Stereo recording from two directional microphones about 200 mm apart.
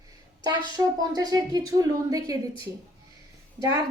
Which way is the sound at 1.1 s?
20° right (ahead or behind).